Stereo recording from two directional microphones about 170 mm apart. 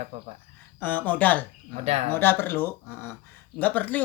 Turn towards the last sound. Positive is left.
turn(degrees=10)  # may be behind; listen again after turning